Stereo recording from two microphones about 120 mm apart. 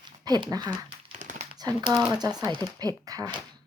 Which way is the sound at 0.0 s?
40° right (ahead or behind).